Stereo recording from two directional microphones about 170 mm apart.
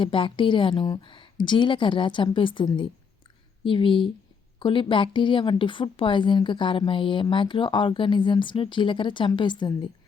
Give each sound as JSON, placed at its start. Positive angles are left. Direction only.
{"t": 0.0, "sound": "a woman's voice", "side_deg": 30}